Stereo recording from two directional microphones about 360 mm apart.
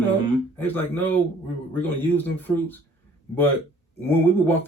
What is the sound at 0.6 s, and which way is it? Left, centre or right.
Speech, centre.